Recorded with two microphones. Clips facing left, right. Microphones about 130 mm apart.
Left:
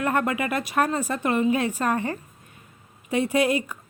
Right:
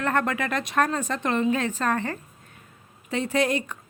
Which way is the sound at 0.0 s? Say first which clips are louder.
Left 1 dB; 10° left (ahead or behind).